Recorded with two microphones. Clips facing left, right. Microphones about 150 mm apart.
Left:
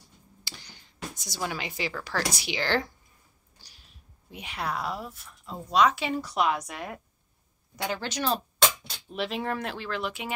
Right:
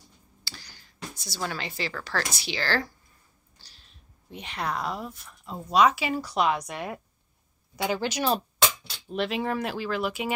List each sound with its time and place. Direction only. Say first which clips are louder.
0.4 s speech: right 1 dB; 20° left (ahead or behind); by 8.4 s 10° right (ahead or behind)
9.1 s speech: right 3 dB; centre (ahead or behind)